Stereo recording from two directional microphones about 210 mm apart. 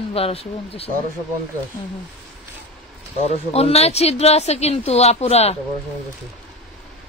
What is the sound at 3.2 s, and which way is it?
Speech, 30° left (ahead or behind).